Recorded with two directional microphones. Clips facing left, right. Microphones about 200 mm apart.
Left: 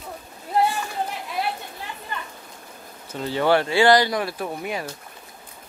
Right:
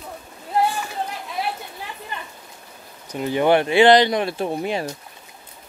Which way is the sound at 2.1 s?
20° right (ahead or behind).